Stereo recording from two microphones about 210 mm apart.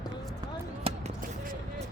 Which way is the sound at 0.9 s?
30° right (ahead or behind).